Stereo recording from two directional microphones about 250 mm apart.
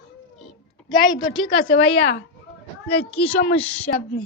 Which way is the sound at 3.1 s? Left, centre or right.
Centre.